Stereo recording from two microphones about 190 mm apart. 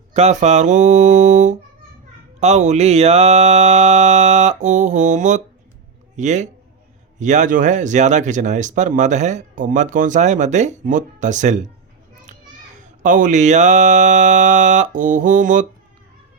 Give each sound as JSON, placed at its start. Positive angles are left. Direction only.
{"t": 0.1, "sound": "speech", "side_deg": -35}
{"t": 13.0, "sound": "speech", "side_deg": -40}